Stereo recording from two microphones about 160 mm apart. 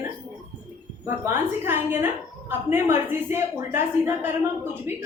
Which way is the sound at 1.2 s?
15° right (ahead or behind).